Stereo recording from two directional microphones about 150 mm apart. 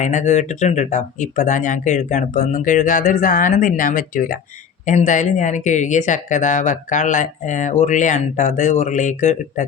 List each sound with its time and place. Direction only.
0.0 s speech: 55° left (ahead or behind)